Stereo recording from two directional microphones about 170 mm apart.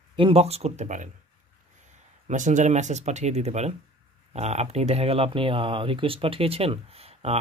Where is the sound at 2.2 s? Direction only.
45° right (ahead or behind).